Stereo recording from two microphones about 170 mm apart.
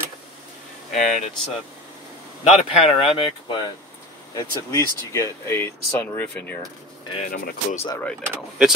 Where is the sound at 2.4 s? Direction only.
40° left (ahead or behind).